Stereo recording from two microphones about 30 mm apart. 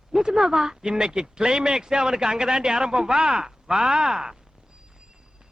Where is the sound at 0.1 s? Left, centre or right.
Right.